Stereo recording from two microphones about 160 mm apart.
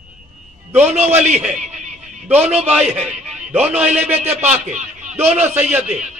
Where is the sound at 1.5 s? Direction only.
45° right (ahead or behind).